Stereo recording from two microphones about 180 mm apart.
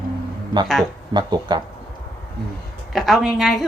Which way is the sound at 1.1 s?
25° right (ahead or behind).